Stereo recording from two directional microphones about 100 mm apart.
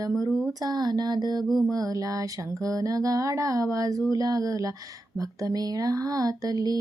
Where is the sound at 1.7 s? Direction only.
35° right (ahead or behind).